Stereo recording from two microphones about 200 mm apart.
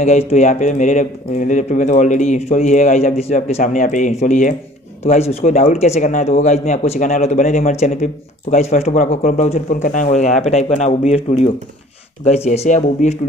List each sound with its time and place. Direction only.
0.0 s speech: 35° left (ahead or behind)